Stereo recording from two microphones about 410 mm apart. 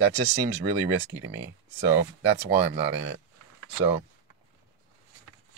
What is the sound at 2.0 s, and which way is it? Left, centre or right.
Speech, right.